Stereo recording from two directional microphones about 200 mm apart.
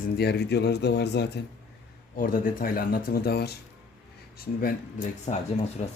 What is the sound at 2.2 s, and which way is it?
Speech, 45° left (ahead or behind).